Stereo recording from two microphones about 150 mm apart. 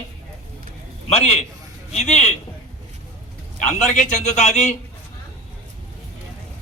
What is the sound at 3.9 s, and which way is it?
Speech, 50° left (ahead or behind).